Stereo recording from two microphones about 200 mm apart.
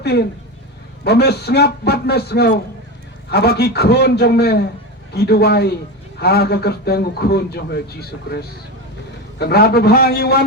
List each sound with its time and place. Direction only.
0.0 s a man's voice: 55° left (ahead or behind)